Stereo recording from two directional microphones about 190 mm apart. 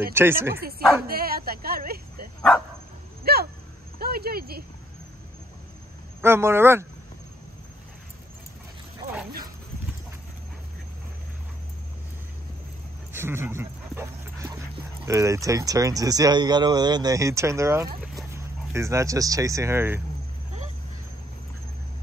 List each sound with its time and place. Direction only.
0.1 s speech: 10° right (ahead or behind)
0.6 s speech: 55° right (ahead or behind)
3.3 s a sound: 55° right (ahead or behind)
4.0 s speech: 55° right (ahead or behind)
6.2 s speech: 10° right (ahead or behind)
13.1 s dog: 10° right (ahead or behind)
15.0 s speech: 15° right (ahead or behind)